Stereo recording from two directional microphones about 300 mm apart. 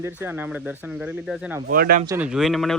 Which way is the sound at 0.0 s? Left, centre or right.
Centre.